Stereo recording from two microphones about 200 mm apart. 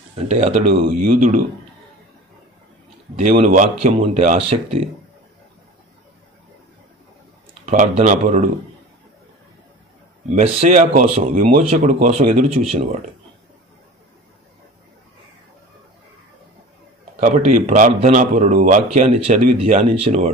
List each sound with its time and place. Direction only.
0.3 s a man's voice: 35° right (ahead or behind)
3.2 s a man's voice: 35° right (ahead or behind)
7.6 s a man's voice: 35° right (ahead or behind)
10.3 s a man's voice: 35° right (ahead or behind)
17.2 s a man's voice: 35° right (ahead or behind)